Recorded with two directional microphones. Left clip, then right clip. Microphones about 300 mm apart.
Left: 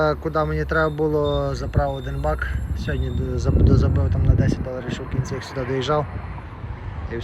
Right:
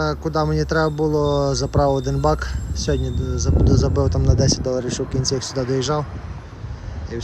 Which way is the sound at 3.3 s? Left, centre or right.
Centre.